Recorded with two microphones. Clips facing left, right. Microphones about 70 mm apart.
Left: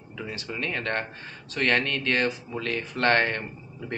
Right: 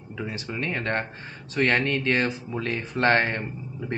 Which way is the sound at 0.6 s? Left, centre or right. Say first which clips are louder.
Right 2 dB; centre.